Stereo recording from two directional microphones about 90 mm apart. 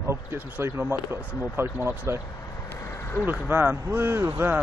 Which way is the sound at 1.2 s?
25° left (ahead or behind).